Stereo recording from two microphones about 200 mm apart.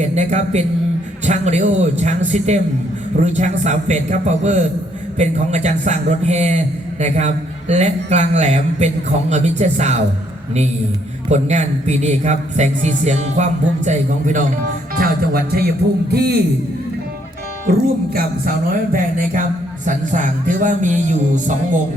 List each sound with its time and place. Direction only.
0.0 s a man's voice: 35° right (ahead or behind)
11.3 s a man's voice: 35° right (ahead or behind); by 16.4 s 50° right (ahead or behind)
17.7 s a man's voice: 50° right (ahead or behind)